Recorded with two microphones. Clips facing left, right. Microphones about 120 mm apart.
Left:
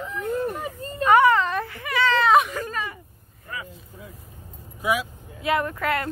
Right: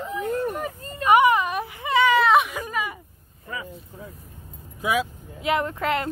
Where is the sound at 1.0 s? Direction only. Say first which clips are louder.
Even; 15° right (ahead or behind).